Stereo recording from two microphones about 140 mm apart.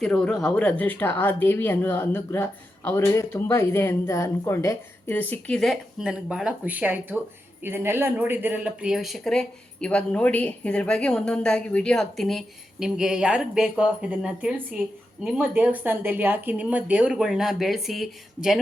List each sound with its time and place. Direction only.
0.0 s speech: 5° left (ahead or behind); by 5.2 s 20° left (ahead or behind)
5.3 s speech: 5° left (ahead or behind)